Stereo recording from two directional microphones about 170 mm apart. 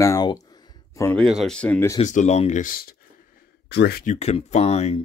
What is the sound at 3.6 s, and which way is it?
Speech, 75° left (ahead or behind).